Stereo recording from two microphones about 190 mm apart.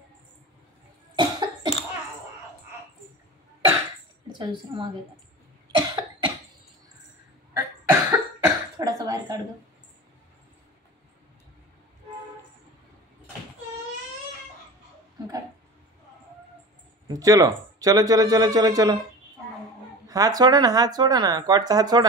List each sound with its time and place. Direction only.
1.1 s cough: 20° right (ahead or behind)
4.3 s a woman's voice: 25° right (ahead or behind)
5.8 s cough: 20° right (ahead or behind)
7.5 s cough: 10° right (ahead or behind)
17.1 s speech: 20° right (ahead or behind)
20.1 s speech: 20° right (ahead or behind)